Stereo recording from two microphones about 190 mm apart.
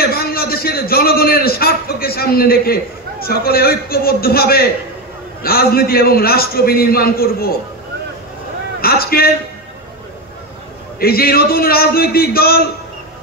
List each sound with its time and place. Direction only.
0.0 s a sound: 50° left (ahead or behind)
5.4 s a man's voice: 50° left (ahead or behind)
8.8 s a man's voice: 50° left (ahead or behind)
11.0 s a man's voice: 50° left (ahead or behind)